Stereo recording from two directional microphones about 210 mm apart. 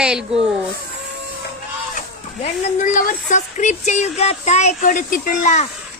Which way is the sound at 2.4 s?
40° left (ahead or behind).